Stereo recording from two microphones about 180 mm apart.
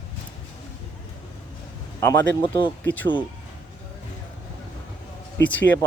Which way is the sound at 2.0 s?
20° left (ahead or behind).